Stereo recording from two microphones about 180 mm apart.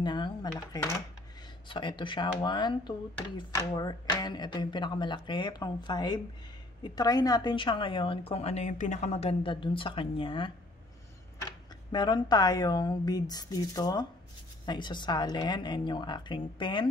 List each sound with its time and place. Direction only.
0.0 s a woman's voice: 25° left (ahead or behind)
11.9 s a woman's voice: 25° left (ahead or behind)